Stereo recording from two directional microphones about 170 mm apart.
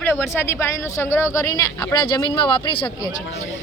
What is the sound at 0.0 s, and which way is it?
A woman's voice, 10° left (ahead or behind).